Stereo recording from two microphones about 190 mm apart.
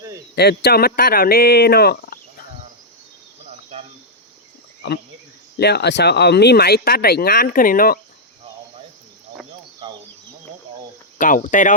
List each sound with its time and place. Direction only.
0.3 s speech: 55° left (ahead or behind)
4.8 s speech: 65° left (ahead or behind)
9.8 s chicken: 25° right (ahead or behind)
11.2 s speech: 45° left (ahead or behind)